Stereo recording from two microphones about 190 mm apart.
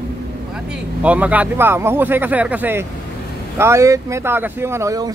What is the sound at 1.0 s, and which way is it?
Speech, 5° right (ahead or behind).